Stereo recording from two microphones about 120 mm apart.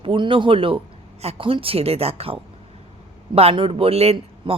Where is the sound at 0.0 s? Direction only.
45° right (ahead or behind).